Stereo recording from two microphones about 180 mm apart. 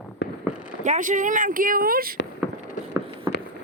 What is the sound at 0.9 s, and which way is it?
Speech, 45° right (ahead or behind).